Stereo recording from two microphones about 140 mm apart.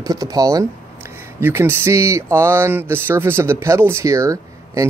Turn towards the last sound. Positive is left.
turn(degrees=-20)  # may be behind; listen again after turning